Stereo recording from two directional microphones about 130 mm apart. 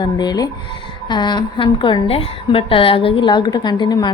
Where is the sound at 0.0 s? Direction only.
30° left (ahead or behind).